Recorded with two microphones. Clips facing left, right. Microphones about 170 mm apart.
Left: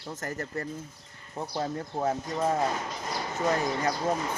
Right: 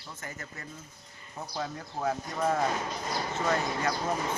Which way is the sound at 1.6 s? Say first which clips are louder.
Left 4 dB; 30° left (ahead or behind).